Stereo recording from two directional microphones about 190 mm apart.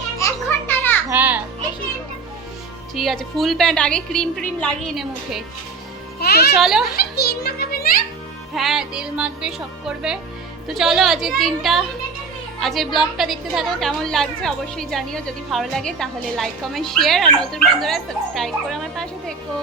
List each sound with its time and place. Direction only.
0.2 s children playing: 15° left (ahead or behind)
1.1 s a child's voice: 10° right (ahead or behind)
2.9 s a woman's voice: centre (ahead or behind)
6.1 s music: 55° left (ahead or behind)
6.6 s a woman's voice: centre (ahead or behind)
6.8 s a sound: 55° left (ahead or behind)
8.5 s a woman's voice: centre (ahead or behind)